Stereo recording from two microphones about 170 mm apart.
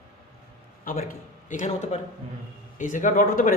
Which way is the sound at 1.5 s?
45° left (ahead or behind).